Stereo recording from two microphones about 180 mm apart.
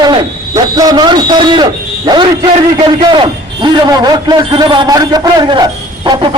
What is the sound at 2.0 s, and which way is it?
A man's voice, 25° right (ahead or behind).